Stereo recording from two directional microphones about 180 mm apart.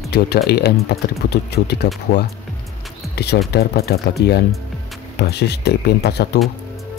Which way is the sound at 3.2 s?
65° left (ahead or behind).